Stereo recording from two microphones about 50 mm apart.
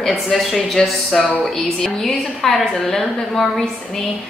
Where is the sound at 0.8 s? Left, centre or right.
Centre.